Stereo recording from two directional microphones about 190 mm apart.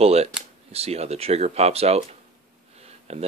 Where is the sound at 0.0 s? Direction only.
35° right (ahead or behind).